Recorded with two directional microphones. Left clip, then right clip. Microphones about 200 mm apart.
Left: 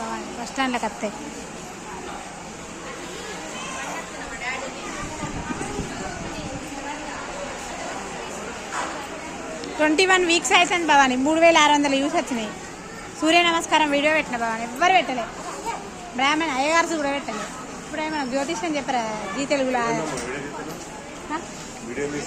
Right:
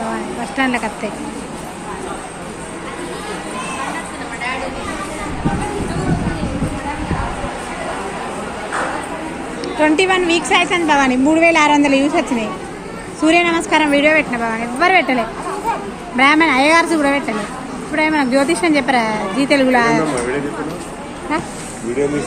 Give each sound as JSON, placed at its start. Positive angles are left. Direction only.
{"t": 0.5, "sound": "speech", "side_deg": 10}
{"t": 9.8, "sound": "a woman's voice", "side_deg": 25}
{"t": 14.8, "sound": "a woman's voice", "side_deg": -5}